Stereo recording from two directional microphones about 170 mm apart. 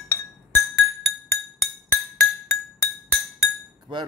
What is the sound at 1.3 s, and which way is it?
Music, 15° left (ahead or behind).